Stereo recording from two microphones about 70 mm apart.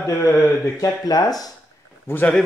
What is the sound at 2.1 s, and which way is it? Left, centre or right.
Speech, left.